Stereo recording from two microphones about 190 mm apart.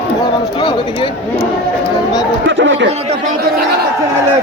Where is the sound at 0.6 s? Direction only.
30° left (ahead or behind).